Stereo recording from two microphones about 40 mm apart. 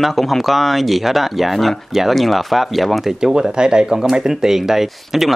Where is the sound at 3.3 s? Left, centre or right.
Centre.